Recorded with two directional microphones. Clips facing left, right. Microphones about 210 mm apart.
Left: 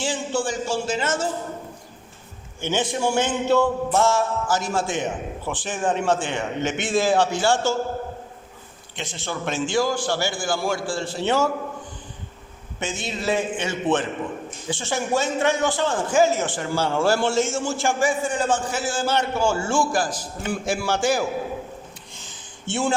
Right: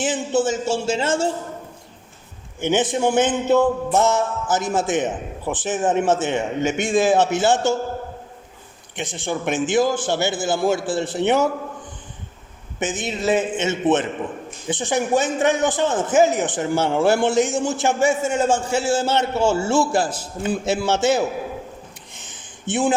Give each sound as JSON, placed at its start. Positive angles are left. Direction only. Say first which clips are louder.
{"t": 0.0, "sound": "speech", "louder": "right 5 dB", "side_deg": -20}
{"t": 2.6, "sound": "a man's voice", "louder": "right 4 dB", "side_deg": -20}
{"t": 9.0, "sound": "a man's voice", "louder": "right 4 dB", "side_deg": -15}
{"t": 12.8, "sound": "a man's voice", "louder": "right 4 dB", "side_deg": -20}
{"t": 22.1, "sound": "a sound", "louder": "right 1 dB", "side_deg": -20}